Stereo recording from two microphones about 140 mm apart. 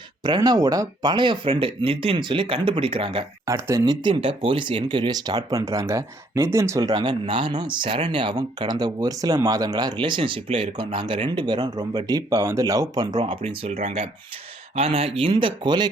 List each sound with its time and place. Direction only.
0.2 s speech: 30° right (ahead or behind)
3.4 s speech: 25° right (ahead or behind)
4.1 s speech: 40° right (ahead or behind)